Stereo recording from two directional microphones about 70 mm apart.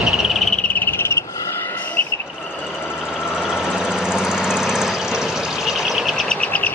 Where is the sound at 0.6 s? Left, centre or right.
Left.